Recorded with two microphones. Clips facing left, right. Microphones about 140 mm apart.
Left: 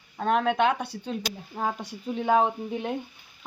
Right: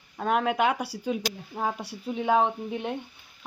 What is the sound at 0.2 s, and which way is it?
Stir, 5° right (ahead or behind).